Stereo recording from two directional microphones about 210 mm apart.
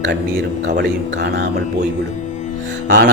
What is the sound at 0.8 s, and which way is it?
Speech, 55° right (ahead or behind).